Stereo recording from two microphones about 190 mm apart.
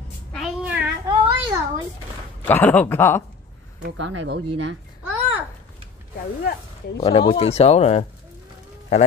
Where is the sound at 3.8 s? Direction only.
65° right (ahead or behind).